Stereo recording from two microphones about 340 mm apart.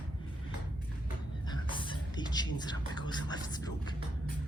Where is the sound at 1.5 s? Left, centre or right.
Centre.